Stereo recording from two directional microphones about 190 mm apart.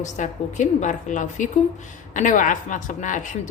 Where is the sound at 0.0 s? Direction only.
40° left (ahead or behind).